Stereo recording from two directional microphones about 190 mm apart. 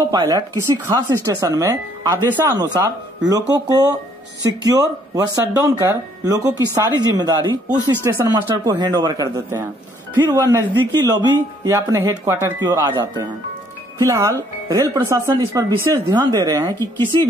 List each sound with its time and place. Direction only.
0.0 s speech: 20° right (ahead or behind)